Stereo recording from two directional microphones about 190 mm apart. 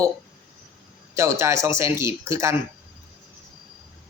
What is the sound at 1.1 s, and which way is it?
A man's voice, 15° right (ahead or behind).